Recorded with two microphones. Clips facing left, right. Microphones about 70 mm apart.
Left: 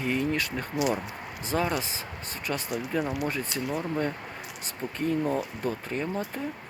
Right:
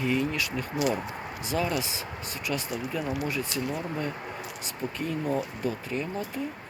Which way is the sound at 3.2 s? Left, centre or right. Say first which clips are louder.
Even; left.